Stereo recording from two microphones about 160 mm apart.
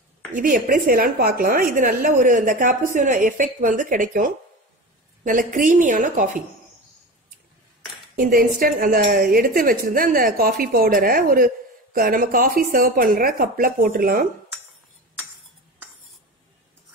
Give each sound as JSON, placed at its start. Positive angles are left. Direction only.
{"t": 0.3, "sound": "a woman's voice", "side_deg": -55}
{"t": 8.2, "sound": "a woman's voice", "side_deg": -65}